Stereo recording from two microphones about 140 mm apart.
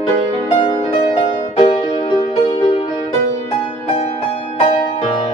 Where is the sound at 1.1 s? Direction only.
45° left (ahead or behind).